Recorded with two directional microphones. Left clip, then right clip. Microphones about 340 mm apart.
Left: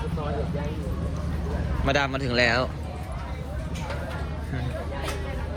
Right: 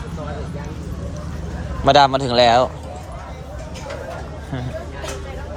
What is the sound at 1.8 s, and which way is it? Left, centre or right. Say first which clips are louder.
Speech: right 12 dB; centre.